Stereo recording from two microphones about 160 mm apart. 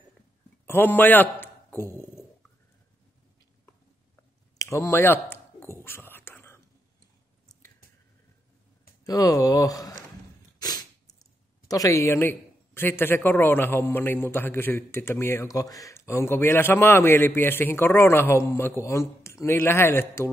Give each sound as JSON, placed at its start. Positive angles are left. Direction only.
{"t": 0.7, "sound": "a man's voice", "side_deg": 10}
{"t": 1.4, "sound": "a sound", "side_deg": 15}
{"t": 4.6, "sound": "whispering", "side_deg": 15}
{"t": 9.0, "sound": "speech", "side_deg": 20}
{"t": 10.6, "sound": "a sound", "side_deg": 25}
{"t": 11.6, "sound": "a man's voice", "side_deg": 20}